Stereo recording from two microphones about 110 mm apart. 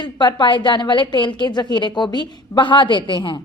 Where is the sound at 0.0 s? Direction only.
45° left (ahead or behind).